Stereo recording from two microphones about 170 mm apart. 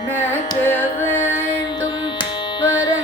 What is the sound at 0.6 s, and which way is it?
Carnatic music, 15° left (ahead or behind).